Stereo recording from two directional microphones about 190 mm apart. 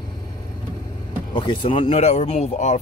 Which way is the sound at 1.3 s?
25° left (ahead or behind).